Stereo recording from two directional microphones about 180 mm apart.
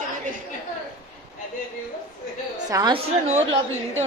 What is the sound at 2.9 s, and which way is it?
Speech, 35° right (ahead or behind).